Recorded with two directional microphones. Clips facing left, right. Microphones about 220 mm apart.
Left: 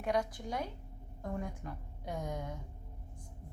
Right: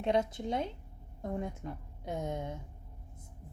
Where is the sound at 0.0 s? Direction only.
25° right (ahead or behind).